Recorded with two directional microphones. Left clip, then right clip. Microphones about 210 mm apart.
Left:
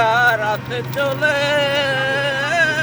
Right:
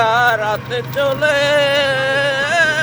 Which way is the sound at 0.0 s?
15° right (ahead or behind).